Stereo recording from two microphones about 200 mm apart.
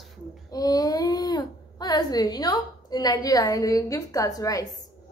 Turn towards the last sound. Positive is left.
turn(degrees=15)  # may be behind; listen again after turning